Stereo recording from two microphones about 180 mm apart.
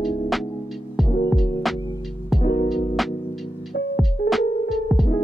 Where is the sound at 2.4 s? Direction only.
25° left (ahead or behind).